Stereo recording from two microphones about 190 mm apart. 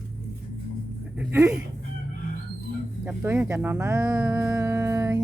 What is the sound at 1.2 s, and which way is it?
Speech, 15° right (ahead or behind).